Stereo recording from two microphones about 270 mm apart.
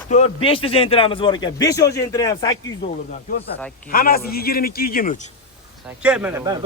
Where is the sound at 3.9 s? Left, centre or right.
Left.